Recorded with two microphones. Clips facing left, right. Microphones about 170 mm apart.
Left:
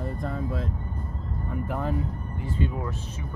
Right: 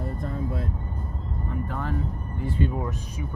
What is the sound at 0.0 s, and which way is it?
Speech, centre (ahead or behind).